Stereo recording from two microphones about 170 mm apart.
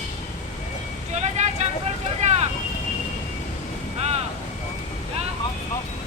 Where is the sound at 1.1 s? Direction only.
40° right (ahead or behind).